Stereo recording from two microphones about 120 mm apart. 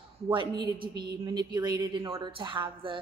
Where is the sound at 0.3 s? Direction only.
45° right (ahead or behind).